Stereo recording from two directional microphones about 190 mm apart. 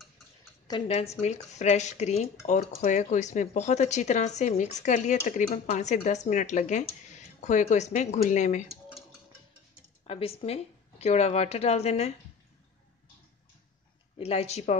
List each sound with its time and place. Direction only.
0.7 s speech: 30° left (ahead or behind)
8.6 s cutlery: centre (ahead or behind)
10.0 s speech: 30° left (ahead or behind)
14.1 s speech: 35° left (ahead or behind)